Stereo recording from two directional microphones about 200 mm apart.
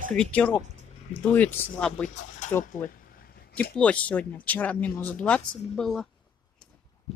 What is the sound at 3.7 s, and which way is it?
Speech, 5° left (ahead or behind).